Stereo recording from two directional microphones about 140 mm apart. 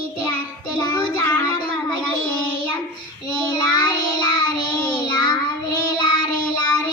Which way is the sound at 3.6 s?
30° left (ahead or behind).